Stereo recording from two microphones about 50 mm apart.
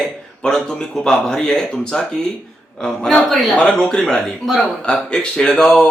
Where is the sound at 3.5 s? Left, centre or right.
Centre.